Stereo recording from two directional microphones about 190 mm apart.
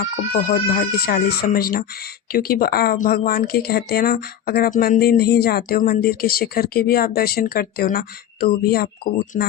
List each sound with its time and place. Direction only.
0.0 s speech: 50° left (ahead or behind)